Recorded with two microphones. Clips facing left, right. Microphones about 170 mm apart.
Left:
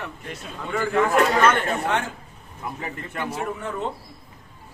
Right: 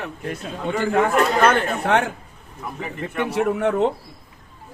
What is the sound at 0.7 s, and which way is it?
Speech, 35° right (ahead or behind).